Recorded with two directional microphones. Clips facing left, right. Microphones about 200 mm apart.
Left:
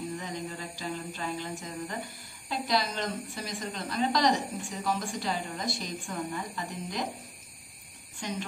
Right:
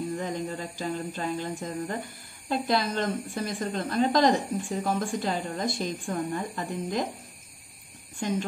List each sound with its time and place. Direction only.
0.1 s a sound: 50° right (ahead or behind)
2.5 s a woman's voice: 55° right (ahead or behind)
8.2 s a woman's voice: 50° right (ahead or behind)